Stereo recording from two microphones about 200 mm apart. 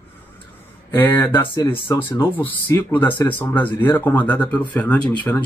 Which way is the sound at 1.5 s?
20° left (ahead or behind).